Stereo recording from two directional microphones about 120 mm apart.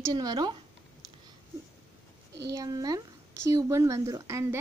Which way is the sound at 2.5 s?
30° right (ahead or behind).